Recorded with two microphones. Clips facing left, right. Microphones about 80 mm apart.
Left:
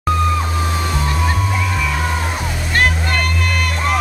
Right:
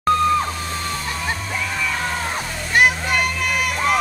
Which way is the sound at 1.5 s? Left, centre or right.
Centre.